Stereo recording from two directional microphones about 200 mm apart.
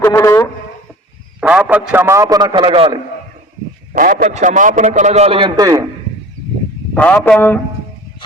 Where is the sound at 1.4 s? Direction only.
5° right (ahead or behind); by 3.0 s 25° right (ahead or behind).